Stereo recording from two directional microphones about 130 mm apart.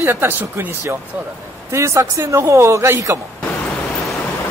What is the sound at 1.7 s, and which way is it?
A man's voice, 20° right (ahead or behind).